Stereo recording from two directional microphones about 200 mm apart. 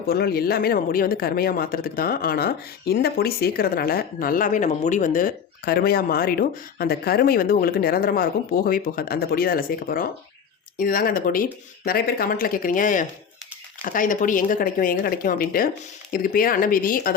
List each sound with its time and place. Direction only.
0.0 s speech: 50° left (ahead or behind)